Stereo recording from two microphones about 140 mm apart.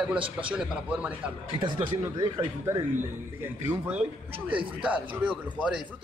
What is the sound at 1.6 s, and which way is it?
Speech, 35° right (ahead or behind).